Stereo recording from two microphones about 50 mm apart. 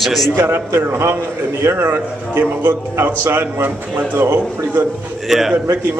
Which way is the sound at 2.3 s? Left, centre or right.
Right.